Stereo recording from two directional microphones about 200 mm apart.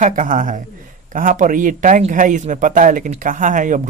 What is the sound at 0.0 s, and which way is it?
Speech, 40° right (ahead or behind).